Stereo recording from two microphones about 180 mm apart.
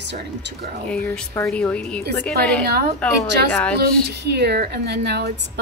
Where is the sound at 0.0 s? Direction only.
75° right (ahead or behind).